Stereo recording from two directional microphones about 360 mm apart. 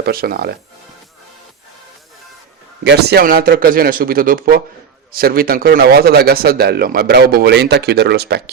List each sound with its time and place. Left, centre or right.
0.0 s a man's voice: right
2.8 s a man's voice: right